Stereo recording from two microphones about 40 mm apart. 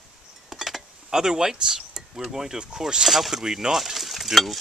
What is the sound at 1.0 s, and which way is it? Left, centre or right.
Speech, centre.